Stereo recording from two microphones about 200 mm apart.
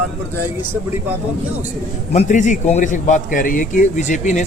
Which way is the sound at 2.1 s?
35° left (ahead or behind).